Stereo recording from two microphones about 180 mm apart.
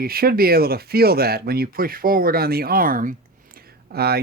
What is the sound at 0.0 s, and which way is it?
Speech, 55° right (ahead or behind).